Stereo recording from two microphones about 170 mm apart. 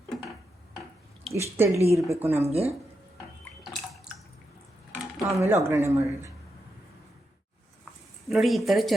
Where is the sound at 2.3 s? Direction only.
35° right (ahead or behind).